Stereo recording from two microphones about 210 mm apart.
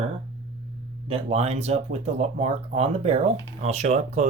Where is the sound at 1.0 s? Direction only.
30° right (ahead or behind).